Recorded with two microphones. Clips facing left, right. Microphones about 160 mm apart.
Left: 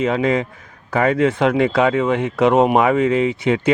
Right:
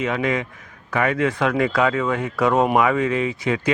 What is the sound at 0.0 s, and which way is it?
Speech, 30° left (ahead or behind).